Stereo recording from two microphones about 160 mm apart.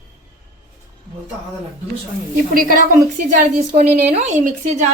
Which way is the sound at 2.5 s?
60° right (ahead or behind).